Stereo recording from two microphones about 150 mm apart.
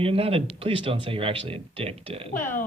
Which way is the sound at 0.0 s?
40° right (ahead or behind).